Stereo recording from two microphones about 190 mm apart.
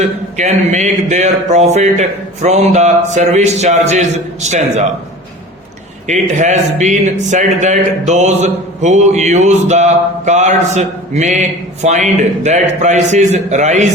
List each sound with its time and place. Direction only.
0.0 s a man's voice: 35° right (ahead or behind)
6.1 s a man's voice: 40° right (ahead or behind)